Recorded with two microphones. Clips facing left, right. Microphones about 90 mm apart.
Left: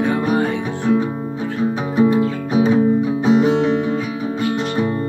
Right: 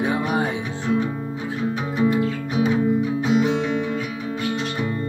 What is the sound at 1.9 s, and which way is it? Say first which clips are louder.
Music: left 5 dB; 30° left (ahead or behind).